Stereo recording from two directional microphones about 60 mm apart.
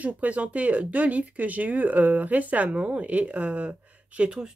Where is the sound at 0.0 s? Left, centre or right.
Right.